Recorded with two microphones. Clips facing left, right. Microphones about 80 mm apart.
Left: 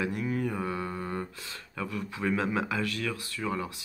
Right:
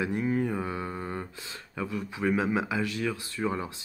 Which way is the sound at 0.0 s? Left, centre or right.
Right.